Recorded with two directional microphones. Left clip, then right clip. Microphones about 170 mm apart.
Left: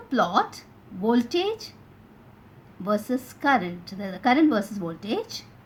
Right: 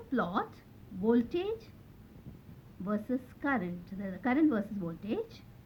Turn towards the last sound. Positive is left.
turn(degrees=35)  # may be behind; listen again after turning